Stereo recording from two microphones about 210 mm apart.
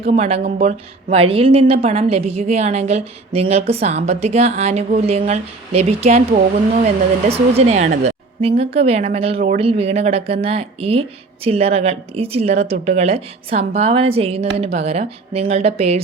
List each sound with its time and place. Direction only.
0.1 s a woman's voice: 30° right (ahead or behind)